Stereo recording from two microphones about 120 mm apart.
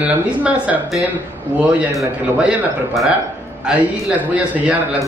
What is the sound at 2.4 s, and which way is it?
A man's voice, 5° right (ahead or behind).